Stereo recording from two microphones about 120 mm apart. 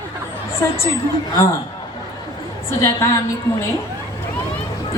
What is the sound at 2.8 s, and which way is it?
Speech, 25° left (ahead or behind).